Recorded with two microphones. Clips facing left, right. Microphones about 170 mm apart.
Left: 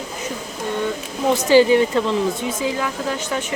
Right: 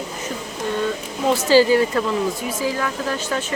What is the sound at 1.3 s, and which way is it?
Speech, 15° left (ahead or behind).